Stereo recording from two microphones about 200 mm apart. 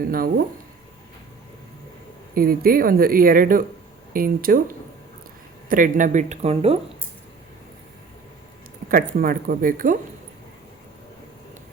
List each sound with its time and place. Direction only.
0.1 s speech: 45° right (ahead or behind)
2.3 s speech: 45° right (ahead or behind)
5.6 s speech: 45° right (ahead or behind)
8.9 s speech: 45° right (ahead or behind)